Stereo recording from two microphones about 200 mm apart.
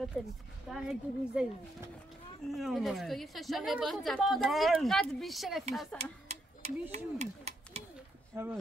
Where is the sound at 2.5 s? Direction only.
Centre (ahead or behind).